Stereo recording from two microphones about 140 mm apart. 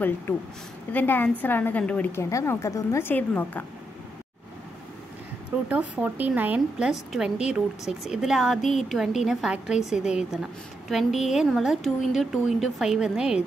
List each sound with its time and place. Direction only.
0.9 s a woman's voice: 15° left (ahead or behind)
2.2 s a woman's voice: 20° left (ahead or behind)
5.7 s a woman's voice: 10° right (ahead or behind)